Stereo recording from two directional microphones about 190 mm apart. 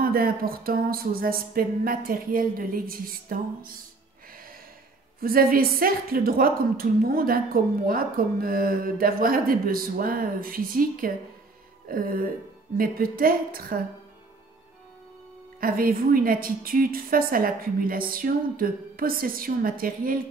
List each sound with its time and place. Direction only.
0.0 s a woman's voice: 50° right (ahead or behind)
5.2 s a woman's voice: 50° right (ahead or behind)
15.6 s a woman's voice: 50° right (ahead or behind)